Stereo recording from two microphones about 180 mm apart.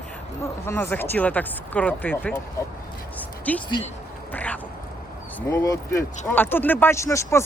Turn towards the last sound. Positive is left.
turn(degrees=15)  # may be behind; listen again after turning